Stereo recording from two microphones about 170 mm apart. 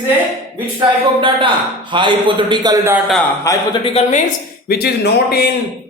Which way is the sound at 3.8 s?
40° left (ahead or behind).